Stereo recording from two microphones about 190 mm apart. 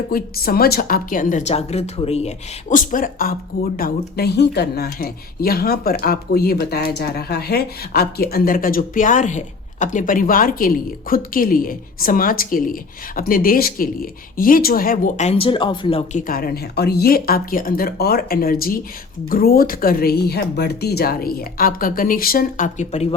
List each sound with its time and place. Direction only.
0.1 s speech: 50° left (ahead or behind); by 16.2 s 30° left (ahead or behind)
16.2 s speech: 50° left (ahead or behind)